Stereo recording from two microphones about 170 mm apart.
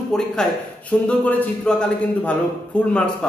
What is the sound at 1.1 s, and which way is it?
Speech, 5° left (ahead or behind).